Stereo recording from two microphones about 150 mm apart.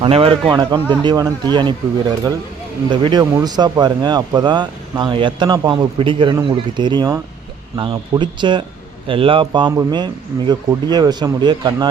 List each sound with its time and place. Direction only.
0.0 s speech: 35° right (ahead or behind)